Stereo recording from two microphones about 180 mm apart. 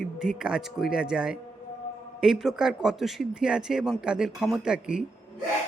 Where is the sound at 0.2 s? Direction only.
5° right (ahead or behind).